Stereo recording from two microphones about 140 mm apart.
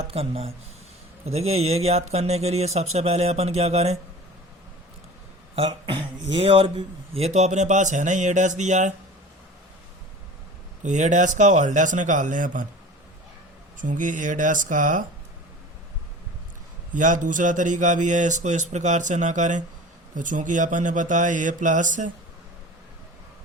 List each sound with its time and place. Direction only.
0.1 s speech: 45° right (ahead or behind)
5.5 s a sound: 40° right (ahead or behind)
6.3 s speech: 40° right (ahead or behind); by 8.9 s 60° right (ahead or behind)
10.8 s speech: 60° right (ahead or behind)
13.7 s speech: 65° right (ahead or behind)
16.9 s speech: 65° right (ahead or behind)